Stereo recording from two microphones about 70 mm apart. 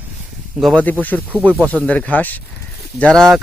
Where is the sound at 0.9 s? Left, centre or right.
Left.